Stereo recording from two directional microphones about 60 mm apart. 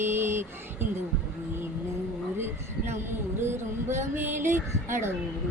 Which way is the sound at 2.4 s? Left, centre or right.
Right.